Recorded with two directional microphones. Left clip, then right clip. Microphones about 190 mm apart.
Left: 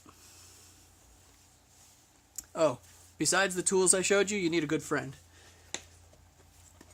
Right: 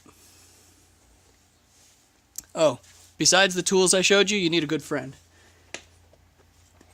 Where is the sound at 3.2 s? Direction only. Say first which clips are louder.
Right 9 dB; 35° right (ahead or behind).